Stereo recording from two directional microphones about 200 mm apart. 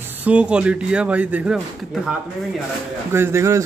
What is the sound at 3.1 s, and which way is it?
Speech, 10° right (ahead or behind).